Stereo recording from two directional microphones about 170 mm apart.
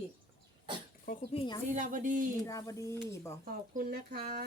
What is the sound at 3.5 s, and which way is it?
Speech, 60° right (ahead or behind).